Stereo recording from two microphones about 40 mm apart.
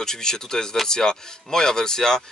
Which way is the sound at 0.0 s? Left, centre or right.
Centre.